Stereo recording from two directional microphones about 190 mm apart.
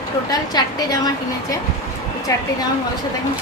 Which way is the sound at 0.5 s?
20° left (ahead or behind).